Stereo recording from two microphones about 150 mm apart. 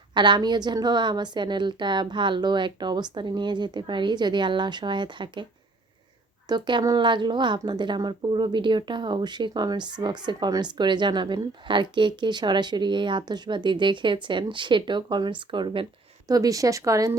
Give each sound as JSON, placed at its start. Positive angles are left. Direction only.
{"t": 0.1, "sound": "a woman's voice", "side_deg": -30}
{"t": 6.5, "sound": "a woman's voice", "side_deg": -30}
{"t": 16.2, "sound": "speech", "side_deg": -25}